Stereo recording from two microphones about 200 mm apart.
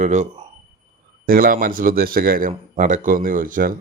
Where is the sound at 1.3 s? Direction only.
45° right (ahead or behind).